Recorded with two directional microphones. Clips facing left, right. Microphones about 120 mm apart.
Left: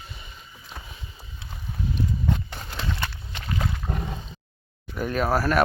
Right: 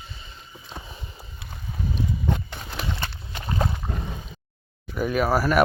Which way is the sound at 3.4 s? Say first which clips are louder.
Right 3 dB; 30° right (ahead or behind).